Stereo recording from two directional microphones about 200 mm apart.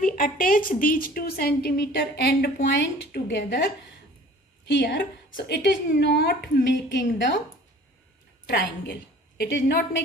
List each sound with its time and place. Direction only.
0.0 s a woman's voice: 45° left (ahead or behind)
4.7 s a woman's voice: 55° left (ahead or behind)
9.4 s a woman's voice: 55° left (ahead or behind)